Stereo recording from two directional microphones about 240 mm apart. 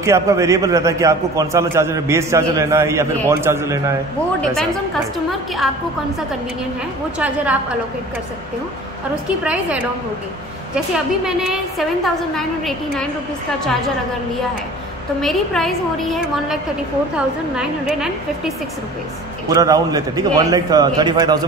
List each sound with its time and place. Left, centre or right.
0.0 s a man's voice: centre
7.2 s a woman's voice: centre
9.4 s a woman's voice: centre
12.0 s a woman's voice: centre
15.1 s a woman's voice: centre
17.6 s a woman's voice: centre
19.4 s a man's voice: centre